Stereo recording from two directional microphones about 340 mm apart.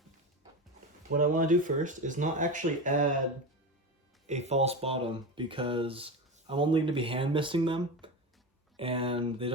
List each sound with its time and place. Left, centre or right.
1.1 s speech: right
4.3 s speech: centre